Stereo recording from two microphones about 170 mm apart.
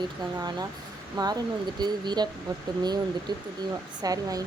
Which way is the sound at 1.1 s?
25° right (ahead or behind).